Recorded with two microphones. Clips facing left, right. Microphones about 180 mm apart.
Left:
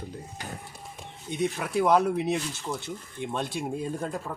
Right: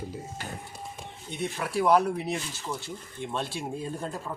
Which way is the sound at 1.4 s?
20° left (ahead or behind).